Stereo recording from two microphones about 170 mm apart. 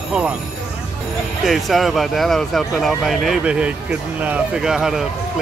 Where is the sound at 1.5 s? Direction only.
Centre (ahead or behind).